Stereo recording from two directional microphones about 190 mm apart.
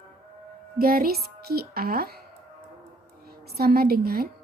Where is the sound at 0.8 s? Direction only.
50° right (ahead or behind).